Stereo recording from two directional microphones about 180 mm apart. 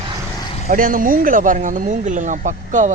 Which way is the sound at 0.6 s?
50° right (ahead or behind).